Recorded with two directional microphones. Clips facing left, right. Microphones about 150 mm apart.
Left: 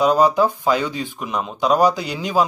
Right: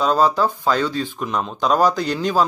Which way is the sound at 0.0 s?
15° left (ahead or behind).